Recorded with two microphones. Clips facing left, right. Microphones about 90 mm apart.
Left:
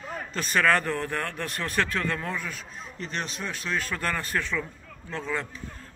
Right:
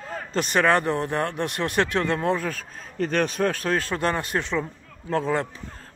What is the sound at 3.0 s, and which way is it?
Speech, 55° right (ahead or behind).